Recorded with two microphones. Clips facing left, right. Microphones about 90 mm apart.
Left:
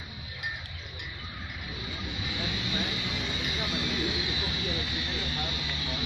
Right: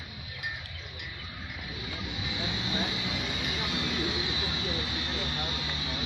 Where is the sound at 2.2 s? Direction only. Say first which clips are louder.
Even; 15° right (ahead or behind).